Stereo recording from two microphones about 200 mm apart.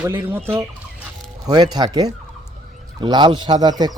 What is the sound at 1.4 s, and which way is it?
Speech, 20° right (ahead or behind).